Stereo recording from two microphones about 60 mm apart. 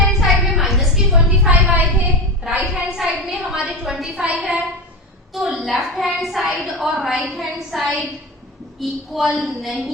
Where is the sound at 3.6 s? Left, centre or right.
Centre.